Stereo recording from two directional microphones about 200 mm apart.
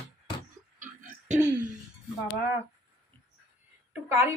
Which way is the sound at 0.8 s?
35° right (ahead or behind).